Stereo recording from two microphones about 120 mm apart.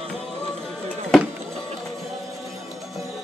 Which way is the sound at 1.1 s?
5° left (ahead or behind).